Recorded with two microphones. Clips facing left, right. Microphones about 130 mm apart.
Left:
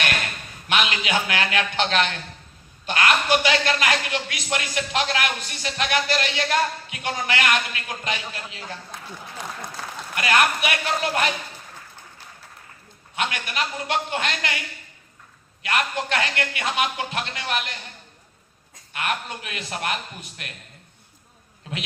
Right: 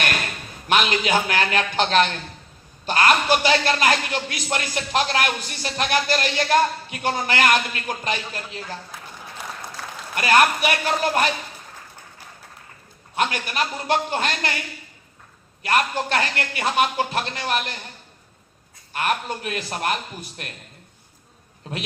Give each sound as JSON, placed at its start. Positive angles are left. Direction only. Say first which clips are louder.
{"t": 0.7, "sound": "a man's voice", "louder": "right 4 dB", "side_deg": -40}
{"t": 10.2, "sound": "a man's voice", "louder": "right 3 dB", "side_deg": -35}
{"t": 13.1, "sound": "a man's voice", "louder": "right 4 dB", "side_deg": -40}
{"t": 15.6, "sound": "a man's voice", "louder": "right 3 dB", "side_deg": -35}
{"t": 18.9, "sound": "a man's voice", "louder": "right 4 dB", "side_deg": -40}